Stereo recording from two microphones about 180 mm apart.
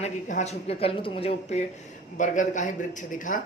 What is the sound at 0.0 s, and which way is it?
A man's voice, 40° left (ahead or behind).